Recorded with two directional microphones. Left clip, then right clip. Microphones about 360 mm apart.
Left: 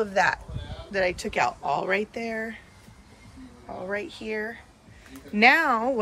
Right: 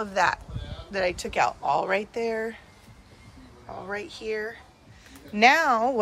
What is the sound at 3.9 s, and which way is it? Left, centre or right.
Speech, centre.